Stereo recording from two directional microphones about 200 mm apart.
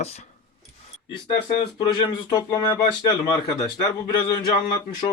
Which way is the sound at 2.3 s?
20° left (ahead or behind).